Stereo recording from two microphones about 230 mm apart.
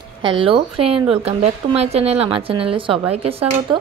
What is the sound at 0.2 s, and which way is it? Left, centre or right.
Speech, right.